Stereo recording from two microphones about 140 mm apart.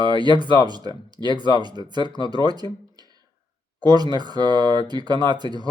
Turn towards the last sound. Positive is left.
turn(degrees=-30)  # may be behind; listen again after turning